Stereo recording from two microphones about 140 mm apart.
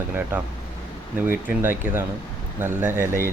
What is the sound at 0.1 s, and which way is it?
Speech, 15° right (ahead or behind).